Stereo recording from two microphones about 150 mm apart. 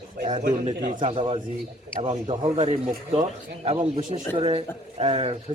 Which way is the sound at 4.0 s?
55° right (ahead or behind).